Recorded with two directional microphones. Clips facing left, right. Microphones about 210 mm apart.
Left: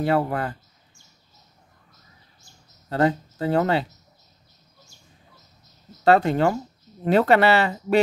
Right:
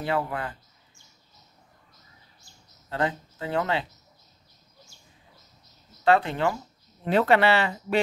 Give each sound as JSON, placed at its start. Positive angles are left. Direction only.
{"t": 0.0, "sound": "speech", "side_deg": 40}
{"t": 2.9, "sound": "speech", "side_deg": 40}
{"t": 6.0, "sound": "speech", "side_deg": 40}